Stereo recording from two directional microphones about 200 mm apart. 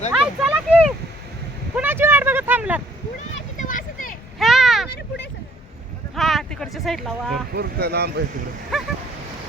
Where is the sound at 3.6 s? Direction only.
40° left (ahead or behind).